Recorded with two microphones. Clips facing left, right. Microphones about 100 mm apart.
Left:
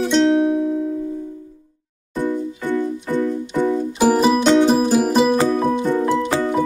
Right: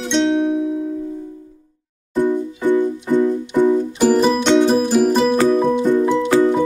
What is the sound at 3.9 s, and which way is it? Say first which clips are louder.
Music: right 1 dB; 10° left (ahead or behind).